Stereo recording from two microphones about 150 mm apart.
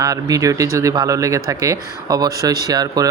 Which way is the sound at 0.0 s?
25° right (ahead or behind).